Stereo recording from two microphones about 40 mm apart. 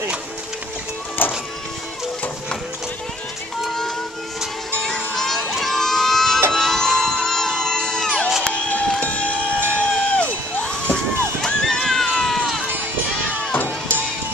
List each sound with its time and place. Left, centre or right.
1.2 s music: left
3.6 s music: centre
5.5 s crowd: centre
6.5 s music: centre
7.2 s music: centre
9.0 s a sound: left
11.4 s a sound: centre
12.1 s run: centre
13.5 s a sound: left